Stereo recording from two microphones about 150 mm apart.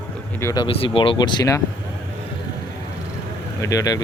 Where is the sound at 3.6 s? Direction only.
20° left (ahead or behind).